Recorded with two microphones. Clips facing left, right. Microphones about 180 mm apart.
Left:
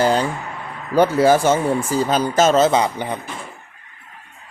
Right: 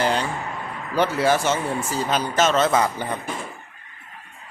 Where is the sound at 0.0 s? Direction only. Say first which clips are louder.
Left 5 dB; 40° left (ahead or behind).